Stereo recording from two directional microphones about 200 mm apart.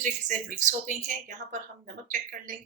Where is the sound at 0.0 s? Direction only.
40° right (ahead or behind).